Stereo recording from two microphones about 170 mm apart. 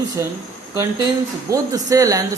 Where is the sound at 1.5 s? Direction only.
20° right (ahead or behind).